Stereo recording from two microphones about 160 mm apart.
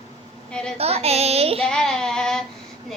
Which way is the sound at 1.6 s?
5° left (ahead or behind).